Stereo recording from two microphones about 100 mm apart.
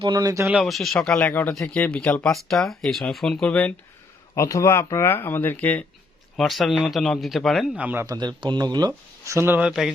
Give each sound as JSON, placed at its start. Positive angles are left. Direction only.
{"t": 0.0, "sound": "speech", "side_deg": -40}
{"t": 0.6, "sound": "speech", "side_deg": 0}
{"t": 1.2, "sound": "speech", "side_deg": 20}
{"t": 4.4, "sound": "speech", "side_deg": 30}
{"t": 6.3, "sound": "speech", "side_deg": 0}
{"t": 7.7, "sound": "speech", "side_deg": -15}
{"t": 8.0, "sound": "speech", "side_deg": -40}
{"t": 9.2, "sound": "speech", "side_deg": -25}
{"t": 9.6, "sound": "speech", "side_deg": -5}